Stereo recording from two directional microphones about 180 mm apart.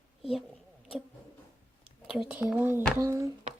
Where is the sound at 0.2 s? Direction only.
Centre (ahead or behind).